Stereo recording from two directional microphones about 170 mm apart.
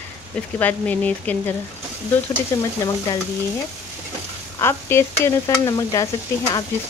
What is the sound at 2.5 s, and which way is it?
Stir, 20° left (ahead or behind).